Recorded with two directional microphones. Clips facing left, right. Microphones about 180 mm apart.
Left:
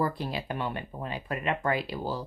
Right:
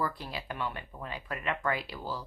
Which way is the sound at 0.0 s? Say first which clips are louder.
Left 5 dB; 25° left (ahead or behind).